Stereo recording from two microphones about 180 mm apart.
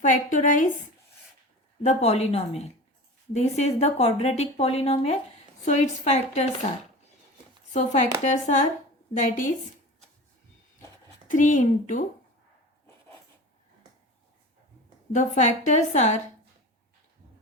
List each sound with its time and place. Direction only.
0.0 s a woman's voice: 45° left (ahead or behind)
7.7 s a woman's voice: 40° left (ahead or behind)
11.3 s a woman's voice: 45° left (ahead or behind)
15.1 s a woman's voice: 40° left (ahead or behind)